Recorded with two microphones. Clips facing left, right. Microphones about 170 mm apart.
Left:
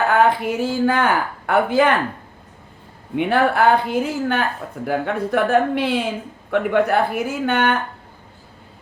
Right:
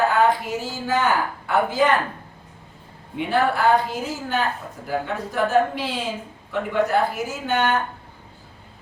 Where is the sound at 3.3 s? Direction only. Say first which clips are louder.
Left 2 dB; 60° left (ahead or behind).